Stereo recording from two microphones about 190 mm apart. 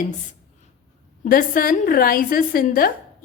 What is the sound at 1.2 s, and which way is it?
A woman's voice, 45° left (ahead or behind).